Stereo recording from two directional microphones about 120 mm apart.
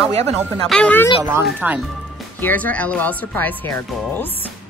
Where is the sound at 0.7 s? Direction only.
10° left (ahead or behind).